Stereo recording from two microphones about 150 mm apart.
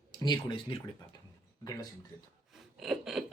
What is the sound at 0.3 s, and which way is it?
Speech, 30° left (ahead or behind).